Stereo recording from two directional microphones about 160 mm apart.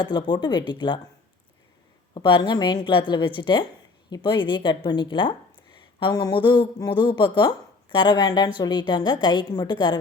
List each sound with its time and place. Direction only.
0.0 s speech: 30° left (ahead or behind)
2.1 s speech: 30° left (ahead or behind)